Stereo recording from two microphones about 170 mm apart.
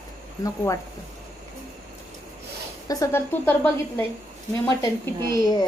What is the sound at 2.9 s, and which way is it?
A woman's voice, 15° left (ahead or behind).